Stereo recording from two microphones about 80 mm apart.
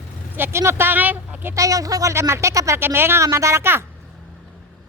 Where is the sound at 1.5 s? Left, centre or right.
Right.